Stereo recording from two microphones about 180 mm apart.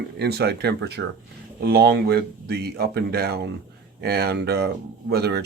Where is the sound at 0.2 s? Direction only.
65° right (ahead or behind).